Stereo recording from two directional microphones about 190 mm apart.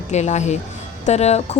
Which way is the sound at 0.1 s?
35° left (ahead or behind).